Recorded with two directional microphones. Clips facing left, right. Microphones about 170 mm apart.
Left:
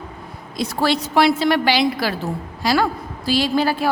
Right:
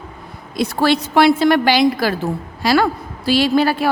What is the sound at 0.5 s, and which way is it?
A woman's voice, 60° right (ahead or behind).